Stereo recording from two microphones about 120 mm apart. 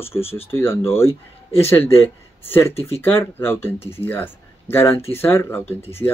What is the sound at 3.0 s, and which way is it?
Speech, 20° left (ahead or behind).